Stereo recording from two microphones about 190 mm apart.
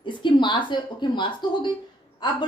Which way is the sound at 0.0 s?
25° left (ahead or behind).